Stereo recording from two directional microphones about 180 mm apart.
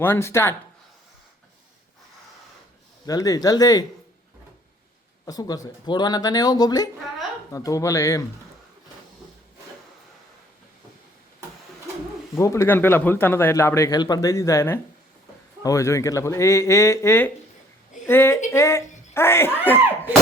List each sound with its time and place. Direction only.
0.0 s speech: 15° left (ahead or behind)
3.1 s speech: 20° left (ahead or behind)
5.2 s speech: 20° left (ahead or behind)
12.3 s speech: 15° left (ahead or behind)